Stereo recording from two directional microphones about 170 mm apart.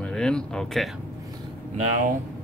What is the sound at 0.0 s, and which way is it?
Speech, 5° left (ahead or behind).